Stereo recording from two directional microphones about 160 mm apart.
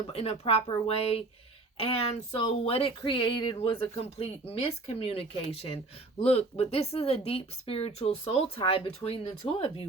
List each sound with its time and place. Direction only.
0.1 s speech: 40° left (ahead or behind)